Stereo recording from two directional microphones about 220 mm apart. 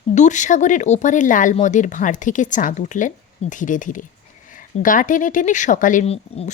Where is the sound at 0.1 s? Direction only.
35° left (ahead or behind).